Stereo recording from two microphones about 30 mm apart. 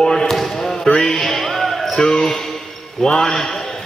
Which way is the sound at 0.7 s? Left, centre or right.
Left.